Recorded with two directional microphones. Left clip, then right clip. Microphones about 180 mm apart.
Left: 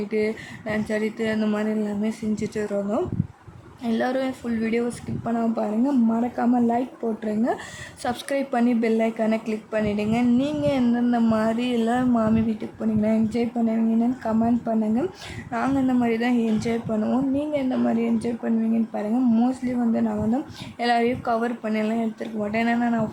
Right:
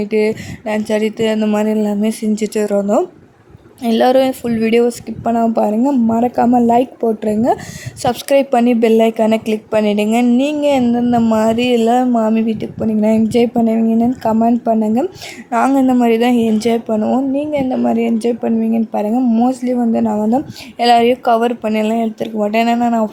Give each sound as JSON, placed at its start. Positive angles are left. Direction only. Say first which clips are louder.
{"t": 0.1, "sound": "speech", "louder": "right 10 dB", "side_deg": -40}
{"t": 1.6, "sound": "speech", "louder": "right 10 dB", "side_deg": -45}
{"t": 11.1, "sound": "a sound", "louder": "right 11 dB", "side_deg": -25}
{"t": 11.3, "sound": "speech", "louder": "right 10 dB", "side_deg": -35}
{"t": 17.0, "sound": "speech", "louder": "right 8 dB", "side_deg": -25}